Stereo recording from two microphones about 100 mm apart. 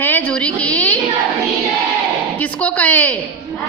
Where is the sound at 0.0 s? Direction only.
15° left (ahead or behind).